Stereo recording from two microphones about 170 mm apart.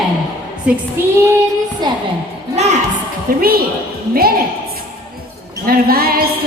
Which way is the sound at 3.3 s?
60° right (ahead or behind).